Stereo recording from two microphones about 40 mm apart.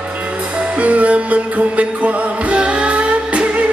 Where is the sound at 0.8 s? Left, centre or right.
Right.